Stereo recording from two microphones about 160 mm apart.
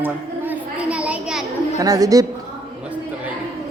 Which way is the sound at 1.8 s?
20° right (ahead or behind).